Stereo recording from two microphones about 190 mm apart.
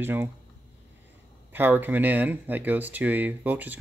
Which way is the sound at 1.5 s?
10° right (ahead or behind).